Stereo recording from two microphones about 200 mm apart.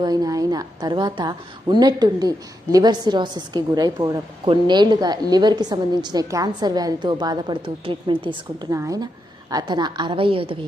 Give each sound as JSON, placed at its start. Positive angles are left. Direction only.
{"t": 0.0, "sound": "a woman's voice", "side_deg": -20}